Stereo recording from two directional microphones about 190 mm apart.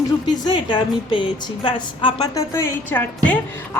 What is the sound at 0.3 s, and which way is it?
A woman's voice, 20° left (ahead or behind).